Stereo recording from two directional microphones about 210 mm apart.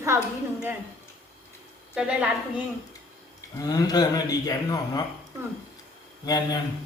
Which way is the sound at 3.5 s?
15° left (ahead or behind).